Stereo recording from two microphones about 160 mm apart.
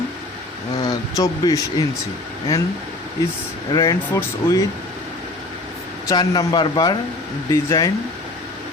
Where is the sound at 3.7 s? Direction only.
25° left (ahead or behind).